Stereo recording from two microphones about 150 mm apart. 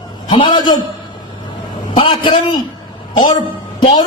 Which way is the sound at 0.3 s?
35° left (ahead or behind).